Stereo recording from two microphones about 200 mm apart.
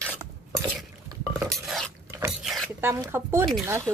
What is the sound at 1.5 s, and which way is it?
Stir, centre (ahead or behind).